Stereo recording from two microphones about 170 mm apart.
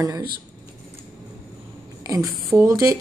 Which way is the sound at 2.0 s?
20° right (ahead or behind).